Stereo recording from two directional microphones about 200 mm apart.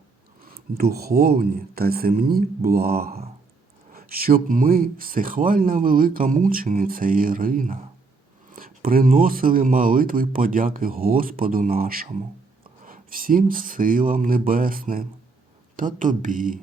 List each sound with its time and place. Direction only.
0.4 s speech: 50° right (ahead or behind)